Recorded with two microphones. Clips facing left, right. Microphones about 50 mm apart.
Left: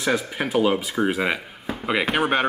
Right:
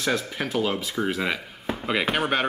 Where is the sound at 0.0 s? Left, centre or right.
Centre.